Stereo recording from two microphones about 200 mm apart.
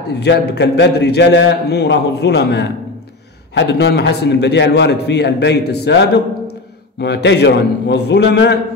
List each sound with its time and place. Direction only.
0.2 s a man's voice: 55° left (ahead or behind)